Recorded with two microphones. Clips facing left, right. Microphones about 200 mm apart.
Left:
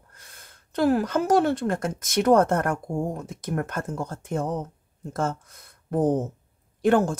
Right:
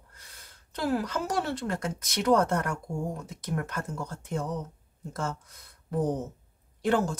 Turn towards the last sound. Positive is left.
turn(degrees=50)  # may be behind; listen again after turning